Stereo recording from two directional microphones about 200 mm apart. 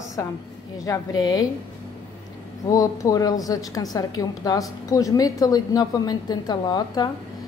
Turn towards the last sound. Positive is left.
turn(degrees=20)  # may be behind; listen again after turning